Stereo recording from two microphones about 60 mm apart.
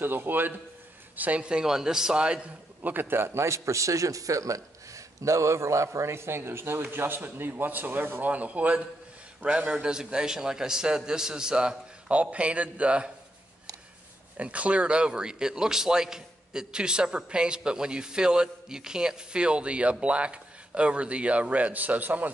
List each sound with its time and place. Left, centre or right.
0.0 s a man's voice: right; by 2.9 s centre
2.9 s a man's voice: right; by 13.1 s centre
14.3 s speech: right